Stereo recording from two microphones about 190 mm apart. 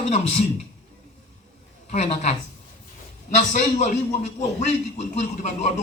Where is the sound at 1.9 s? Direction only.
35° left (ahead or behind).